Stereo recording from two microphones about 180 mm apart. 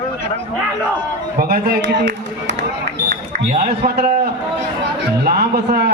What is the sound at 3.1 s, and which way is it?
A man's voice, 50° right (ahead or behind).